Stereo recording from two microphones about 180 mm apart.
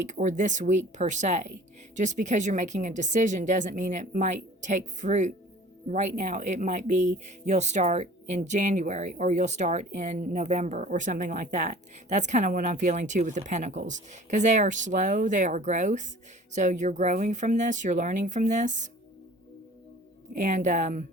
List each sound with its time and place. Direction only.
0.0 s speech: 45° right (ahead or behind)
20.3 s speech: 45° right (ahead or behind)